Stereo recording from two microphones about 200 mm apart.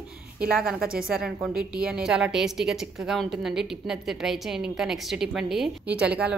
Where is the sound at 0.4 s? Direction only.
5° right (ahead or behind).